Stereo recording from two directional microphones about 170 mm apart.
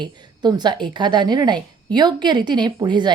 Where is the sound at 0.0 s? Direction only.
25° right (ahead or behind).